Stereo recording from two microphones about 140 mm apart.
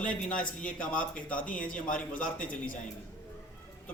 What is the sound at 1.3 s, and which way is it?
Speech, 70° left (ahead or behind).